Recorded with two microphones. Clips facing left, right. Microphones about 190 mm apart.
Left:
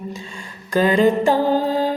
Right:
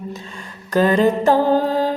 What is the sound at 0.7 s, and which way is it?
Mantra, 10° left (ahead or behind).